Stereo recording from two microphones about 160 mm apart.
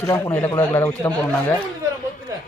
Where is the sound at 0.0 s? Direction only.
20° left (ahead or behind).